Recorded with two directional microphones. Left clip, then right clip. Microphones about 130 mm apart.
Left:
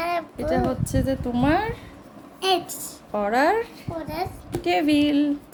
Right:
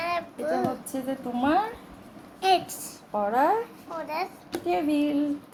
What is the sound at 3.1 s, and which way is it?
Speech, 80° left.